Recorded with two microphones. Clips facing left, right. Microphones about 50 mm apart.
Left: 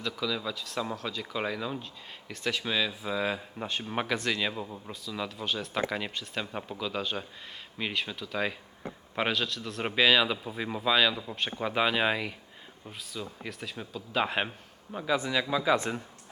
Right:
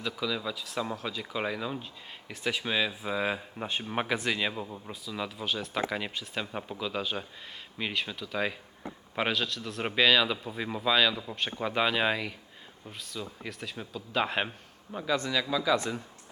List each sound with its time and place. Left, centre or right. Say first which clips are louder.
0.0 s a man's voice: even; centre; by 16.0 s left